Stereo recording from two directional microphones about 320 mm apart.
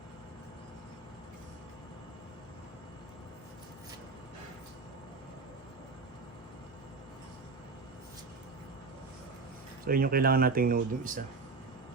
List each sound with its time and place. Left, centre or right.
9.8 s speech: right